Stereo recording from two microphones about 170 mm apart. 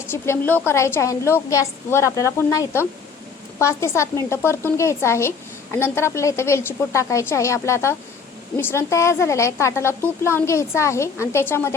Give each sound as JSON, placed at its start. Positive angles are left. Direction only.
{"t": 0.1, "sound": "speech", "side_deg": 15}